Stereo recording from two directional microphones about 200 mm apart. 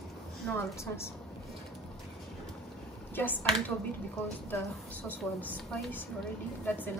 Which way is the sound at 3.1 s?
10° left (ahead or behind).